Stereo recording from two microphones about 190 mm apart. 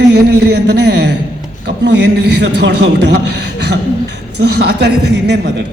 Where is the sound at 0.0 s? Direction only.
60° right (ahead or behind).